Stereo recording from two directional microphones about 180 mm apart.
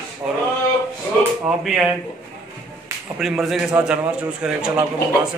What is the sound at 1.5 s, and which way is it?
Speech, 5° right (ahead or behind).